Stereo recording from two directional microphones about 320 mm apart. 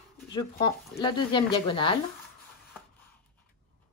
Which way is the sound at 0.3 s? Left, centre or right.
Centre.